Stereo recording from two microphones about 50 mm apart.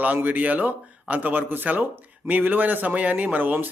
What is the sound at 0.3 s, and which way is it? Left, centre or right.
Speech, right.